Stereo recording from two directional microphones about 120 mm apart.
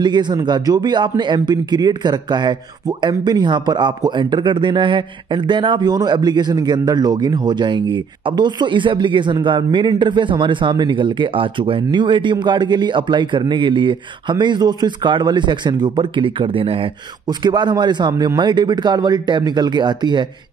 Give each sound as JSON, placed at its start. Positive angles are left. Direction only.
{"t": 0.0, "sound": "speech", "side_deg": -40}